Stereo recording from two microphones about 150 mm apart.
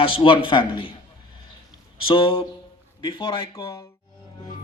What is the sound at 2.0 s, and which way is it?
A man's voice, 35° left (ahead or behind).